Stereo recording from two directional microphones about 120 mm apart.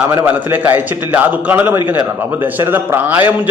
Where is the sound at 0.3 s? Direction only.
15° right (ahead or behind).